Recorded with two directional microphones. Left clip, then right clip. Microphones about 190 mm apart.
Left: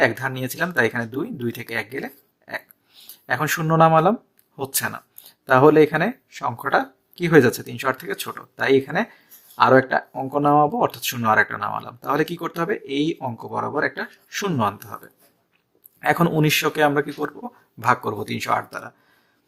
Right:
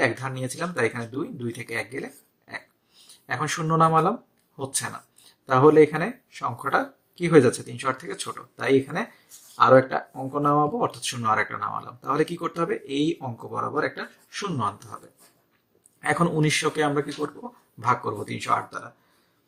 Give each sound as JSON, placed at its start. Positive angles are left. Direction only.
{"t": 0.0, "sound": "speech", "side_deg": 45}
{"t": 3.2, "sound": "speech", "side_deg": 50}